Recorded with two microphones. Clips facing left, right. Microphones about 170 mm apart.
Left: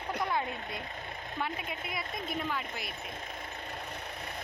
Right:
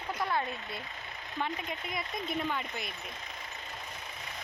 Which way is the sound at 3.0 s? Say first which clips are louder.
Left 3 dB; 55° left (ahead or behind).